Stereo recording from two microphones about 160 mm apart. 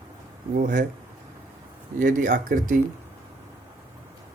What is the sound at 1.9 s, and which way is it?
Speech, 60° right (ahead or behind).